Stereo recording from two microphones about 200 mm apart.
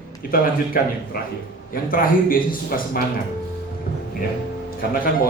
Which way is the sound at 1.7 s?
45° left (ahead or behind).